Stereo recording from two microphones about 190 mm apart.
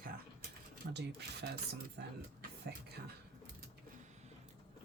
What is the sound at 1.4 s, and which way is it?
Speech, 50° right (ahead or behind).